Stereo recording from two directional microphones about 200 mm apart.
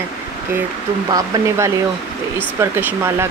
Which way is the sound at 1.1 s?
15° right (ahead or behind).